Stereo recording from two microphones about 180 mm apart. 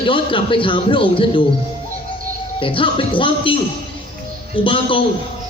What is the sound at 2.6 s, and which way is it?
Speech, 30° left (ahead or behind).